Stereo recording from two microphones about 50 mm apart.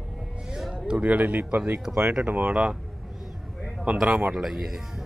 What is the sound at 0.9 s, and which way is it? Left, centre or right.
Speech, right.